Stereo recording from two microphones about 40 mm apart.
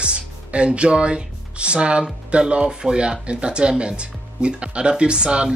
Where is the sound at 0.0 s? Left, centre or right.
Right.